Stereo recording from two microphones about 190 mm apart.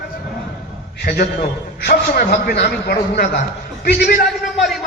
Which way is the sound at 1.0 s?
50° left (ahead or behind).